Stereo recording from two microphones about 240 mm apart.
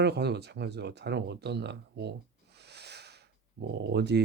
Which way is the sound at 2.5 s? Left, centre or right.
Right.